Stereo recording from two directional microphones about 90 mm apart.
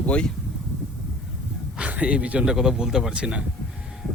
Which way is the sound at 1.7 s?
15° right (ahead or behind).